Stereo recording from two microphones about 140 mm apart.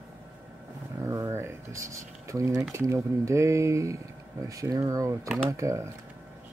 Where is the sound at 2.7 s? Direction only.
20° right (ahead or behind).